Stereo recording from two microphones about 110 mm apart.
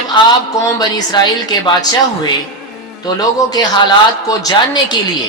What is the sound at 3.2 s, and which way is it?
A man's voice, 40° left (ahead or behind).